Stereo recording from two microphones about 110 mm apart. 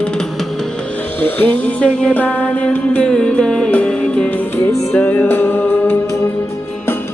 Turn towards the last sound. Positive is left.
turn(degrees=20)  # may be behind; listen again after turning